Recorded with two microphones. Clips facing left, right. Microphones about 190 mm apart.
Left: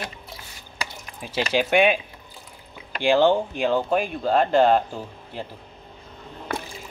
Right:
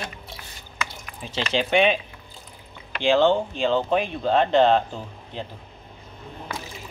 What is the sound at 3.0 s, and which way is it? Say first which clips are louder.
Speech: even; 10° left (ahead or behind).